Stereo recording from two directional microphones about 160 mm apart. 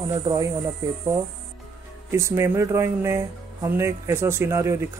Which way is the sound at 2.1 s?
15° right (ahead or behind).